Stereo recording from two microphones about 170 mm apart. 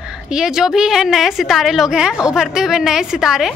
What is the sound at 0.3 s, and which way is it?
A woman's voice, 5° right (ahead or behind).